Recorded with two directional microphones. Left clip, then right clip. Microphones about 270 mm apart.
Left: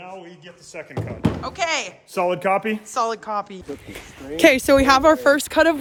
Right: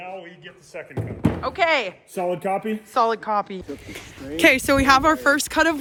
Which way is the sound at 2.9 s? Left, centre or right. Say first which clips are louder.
Right 4 dB; centre.